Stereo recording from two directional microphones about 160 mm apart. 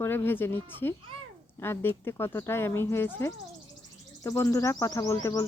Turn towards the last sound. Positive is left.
turn(degrees=20)  # may be behind; listen again after turning